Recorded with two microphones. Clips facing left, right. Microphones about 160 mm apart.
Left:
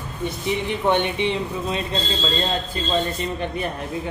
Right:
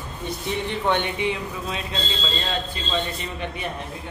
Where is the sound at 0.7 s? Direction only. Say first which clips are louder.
Left 3 dB; 15° left (ahead or behind).